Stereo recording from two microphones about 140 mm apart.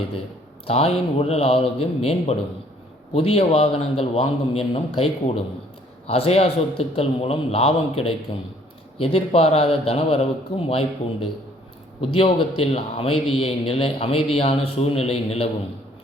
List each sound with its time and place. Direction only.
0.7 s a man's voice: 45° left (ahead or behind)